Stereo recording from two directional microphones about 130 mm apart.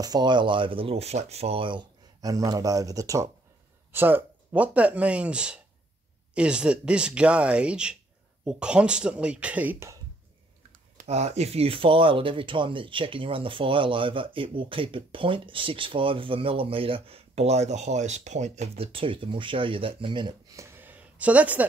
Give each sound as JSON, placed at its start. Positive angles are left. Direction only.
{"t": 0.0, "sound": "speech", "side_deg": -35}
{"t": 3.9, "sound": "speech", "side_deg": -15}
{"t": 11.0, "sound": "speech", "side_deg": -60}
{"t": 20.5, "sound": "a sound", "side_deg": -20}